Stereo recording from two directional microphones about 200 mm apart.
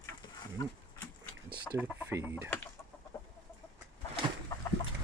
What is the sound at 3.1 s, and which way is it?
Chicken, 10° left (ahead or behind).